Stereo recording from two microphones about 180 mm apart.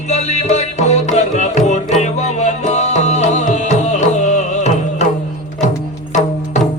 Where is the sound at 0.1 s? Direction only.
40° left (ahead or behind).